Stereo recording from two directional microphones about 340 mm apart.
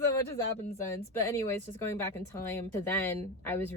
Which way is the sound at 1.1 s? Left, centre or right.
Centre.